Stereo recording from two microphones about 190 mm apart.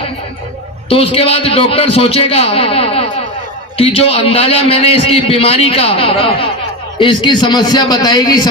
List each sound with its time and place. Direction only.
0.9 s a man's voice: 30° left (ahead or behind)